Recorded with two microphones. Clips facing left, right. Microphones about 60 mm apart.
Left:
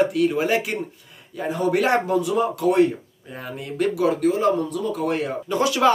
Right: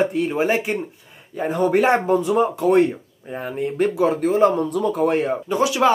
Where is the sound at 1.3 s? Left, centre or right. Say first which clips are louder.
Right 3 dB; right.